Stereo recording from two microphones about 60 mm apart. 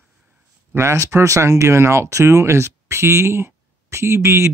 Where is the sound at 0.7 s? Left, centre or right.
Right.